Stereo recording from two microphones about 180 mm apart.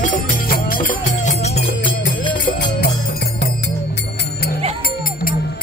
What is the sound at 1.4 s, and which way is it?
Music, 35° left (ahead or behind).